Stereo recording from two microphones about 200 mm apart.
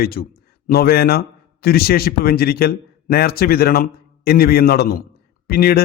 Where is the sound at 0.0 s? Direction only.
50° left (ahead or behind).